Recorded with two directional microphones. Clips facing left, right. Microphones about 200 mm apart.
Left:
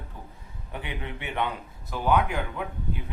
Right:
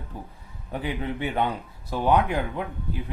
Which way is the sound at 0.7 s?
35° right (ahead or behind).